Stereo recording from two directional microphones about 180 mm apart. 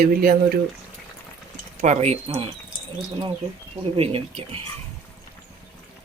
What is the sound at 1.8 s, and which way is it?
Speech, 40° right (ahead or behind).